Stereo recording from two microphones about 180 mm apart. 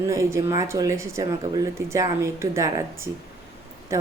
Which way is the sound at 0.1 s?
15° right (ahead or behind).